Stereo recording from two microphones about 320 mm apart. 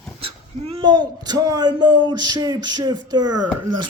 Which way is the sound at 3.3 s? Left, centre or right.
Right.